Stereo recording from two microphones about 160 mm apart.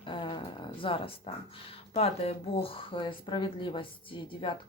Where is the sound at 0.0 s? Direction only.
30° left (ahead or behind).